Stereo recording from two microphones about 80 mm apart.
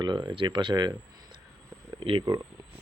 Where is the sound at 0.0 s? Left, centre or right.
Right.